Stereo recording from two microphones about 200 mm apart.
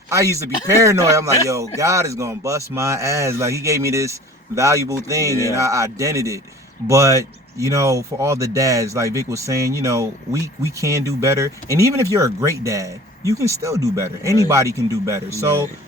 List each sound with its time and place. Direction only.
0.1 s a man's voice: 15° right (ahead or behind)